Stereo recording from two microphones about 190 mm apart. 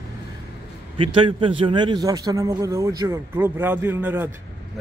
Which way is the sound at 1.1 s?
25° right (ahead or behind).